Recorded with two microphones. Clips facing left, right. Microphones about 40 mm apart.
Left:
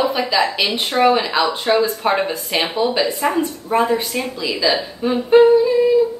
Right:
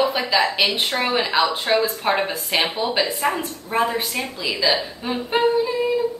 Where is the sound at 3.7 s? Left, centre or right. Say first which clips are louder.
Left 4 dB; centre.